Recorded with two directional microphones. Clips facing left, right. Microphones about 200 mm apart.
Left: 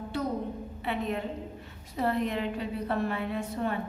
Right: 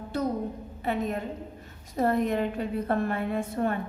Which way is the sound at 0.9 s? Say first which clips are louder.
Right 3 dB; 45° right (ahead or behind).